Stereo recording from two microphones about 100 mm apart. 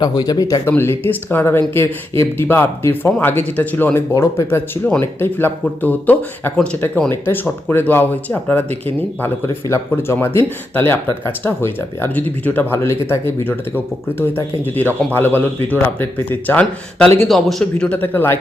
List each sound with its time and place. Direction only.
0.2 s speech: 40° left (ahead or behind)
0.6 s speech: 25° left (ahead or behind)
4.1 s speech: 30° left (ahead or behind)
9.2 s speech: 25° left (ahead or behind)
17.2 s speech: 5° left (ahead or behind); by 18.3 s 20° left (ahead or behind)